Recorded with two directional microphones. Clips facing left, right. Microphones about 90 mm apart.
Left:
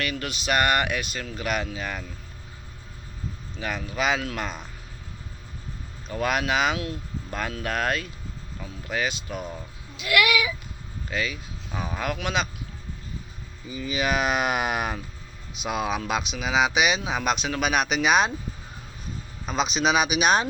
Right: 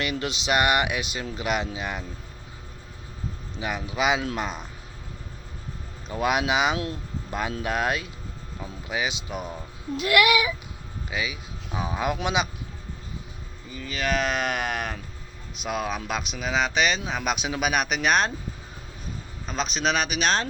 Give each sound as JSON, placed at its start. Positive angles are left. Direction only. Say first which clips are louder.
{"t": 0.0, "sound": "speech", "louder": "right 1 dB", "side_deg": -20}
{"t": 3.6, "sound": "speech", "louder": "right 1 dB", "side_deg": -15}
{"t": 6.1, "sound": "speech", "louder": "right 1 dB", "side_deg": -15}
{"t": 6.7, "sound": "speech", "louder": "right 1 dB", "side_deg": -30}
{"t": 7.6, "sound": "speech", "louder": "even", "side_deg": -15}
{"t": 10.0, "sound": "a sound", "louder": "right 2 dB", "side_deg": -35}
{"t": 11.1, "sound": "speech", "louder": "left 1 dB", "side_deg": -10}
{"t": 13.7, "sound": "speech", "louder": "left 2 dB", "side_deg": 10}
{"t": 19.5, "sound": "speech", "louder": "left 3 dB", "side_deg": 5}